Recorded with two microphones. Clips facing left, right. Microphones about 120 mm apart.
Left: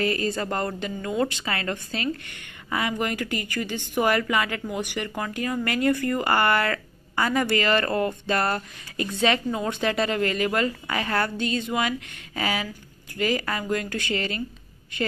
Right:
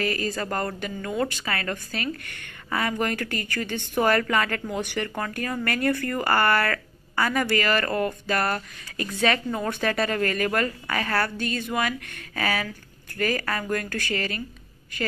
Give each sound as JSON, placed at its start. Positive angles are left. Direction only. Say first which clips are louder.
{"t": 0.0, "sound": "a woman's voice", "louder": "left 2 dB", "side_deg": 30}